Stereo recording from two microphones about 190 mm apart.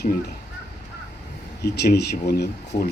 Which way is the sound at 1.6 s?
60° left (ahead or behind).